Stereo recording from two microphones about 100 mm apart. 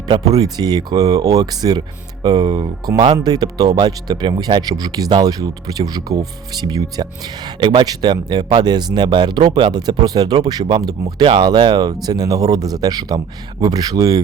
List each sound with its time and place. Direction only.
0.2 s speech: 40° right (ahead or behind)